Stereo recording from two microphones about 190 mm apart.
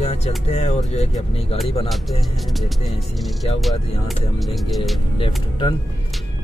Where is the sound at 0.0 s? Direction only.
35° left (ahead or behind).